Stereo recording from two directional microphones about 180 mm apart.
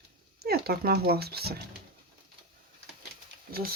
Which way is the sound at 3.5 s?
55° right (ahead or behind).